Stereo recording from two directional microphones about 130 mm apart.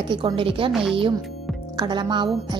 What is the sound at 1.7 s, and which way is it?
Speech, 35° right (ahead or behind).